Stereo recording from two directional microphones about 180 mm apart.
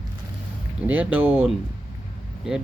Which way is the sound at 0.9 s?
10° right (ahead or behind).